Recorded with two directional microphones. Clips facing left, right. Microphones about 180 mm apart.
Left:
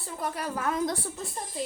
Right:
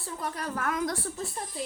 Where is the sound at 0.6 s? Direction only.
25° left (ahead or behind).